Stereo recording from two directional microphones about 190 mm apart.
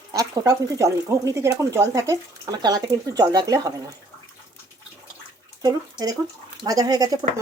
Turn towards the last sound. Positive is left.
turn(degrees=-20)  # may be behind; listen again after turning